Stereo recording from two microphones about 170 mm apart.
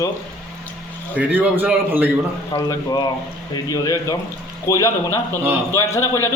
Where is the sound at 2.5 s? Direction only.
20° left (ahead or behind).